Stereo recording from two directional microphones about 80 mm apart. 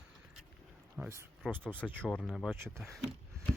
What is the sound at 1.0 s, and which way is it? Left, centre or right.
Speech, centre.